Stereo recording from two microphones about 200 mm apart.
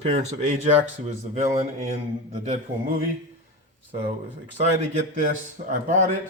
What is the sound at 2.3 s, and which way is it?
Speech, 35° right (ahead or behind).